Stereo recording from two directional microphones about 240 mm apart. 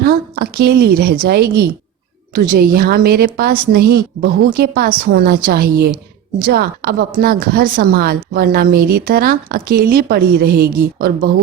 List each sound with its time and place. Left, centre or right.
0.0 s a woman's voice: right